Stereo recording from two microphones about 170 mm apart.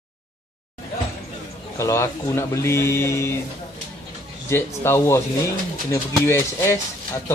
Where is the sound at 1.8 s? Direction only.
15° left (ahead or behind).